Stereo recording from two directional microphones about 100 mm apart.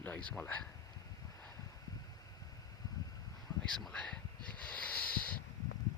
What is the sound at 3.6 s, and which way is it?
Speech, 5° left (ahead or behind).